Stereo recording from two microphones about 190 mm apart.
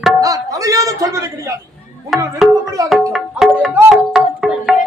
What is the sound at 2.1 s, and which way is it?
Speech, centre (ahead or behind).